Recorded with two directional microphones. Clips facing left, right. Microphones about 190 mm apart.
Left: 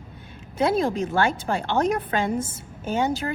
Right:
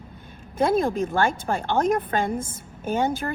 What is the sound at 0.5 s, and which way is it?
A woman's voice, 50° right (ahead or behind).